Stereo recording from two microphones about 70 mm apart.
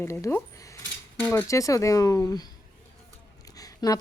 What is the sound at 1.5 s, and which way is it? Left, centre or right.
Speech, left.